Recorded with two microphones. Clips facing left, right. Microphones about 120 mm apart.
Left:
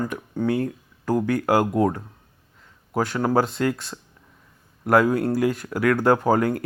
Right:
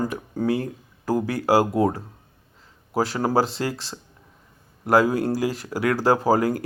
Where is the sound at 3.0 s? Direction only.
30° right (ahead or behind).